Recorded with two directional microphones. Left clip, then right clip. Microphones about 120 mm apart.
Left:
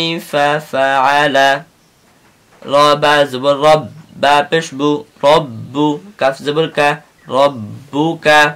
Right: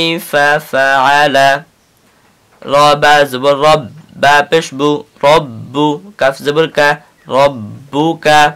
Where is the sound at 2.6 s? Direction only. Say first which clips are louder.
Right 2 dB; 35° right (ahead or behind).